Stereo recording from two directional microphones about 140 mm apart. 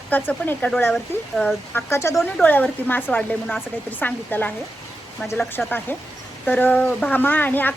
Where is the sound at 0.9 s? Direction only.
Centre (ahead or behind).